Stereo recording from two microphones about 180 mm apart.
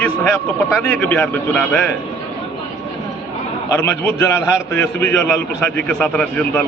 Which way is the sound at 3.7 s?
15° left (ahead or behind).